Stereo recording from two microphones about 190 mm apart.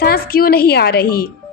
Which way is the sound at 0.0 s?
50° left (ahead or behind).